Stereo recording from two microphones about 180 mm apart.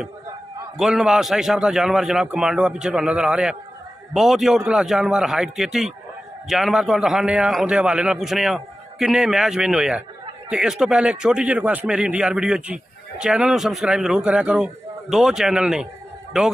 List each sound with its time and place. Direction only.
0.7 s a man's voice: centre (ahead or behind)